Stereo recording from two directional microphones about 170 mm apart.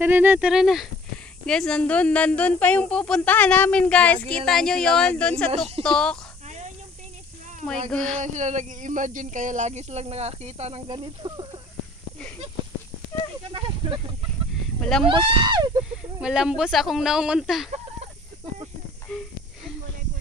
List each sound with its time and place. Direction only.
0.0 s speech: 10° right (ahead or behind); by 6.1 s 5° left (ahead or behind)
7.9 s speech: 5° left (ahead or behind)
8.2 s speech: 45° right (ahead or behind)
10.9 s speech: 25° right (ahead or behind)
13.5 s a sound: 30° right (ahead or behind)
14.8 s speech: 5° left (ahead or behind)
15.0 s speech: 30° right (ahead or behind)
16.2 s speech: 5° right (ahead or behind)